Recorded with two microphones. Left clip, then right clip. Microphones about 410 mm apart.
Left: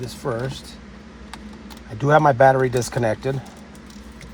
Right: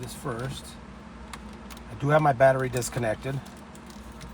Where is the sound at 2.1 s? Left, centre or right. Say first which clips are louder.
Left 6 dB; centre.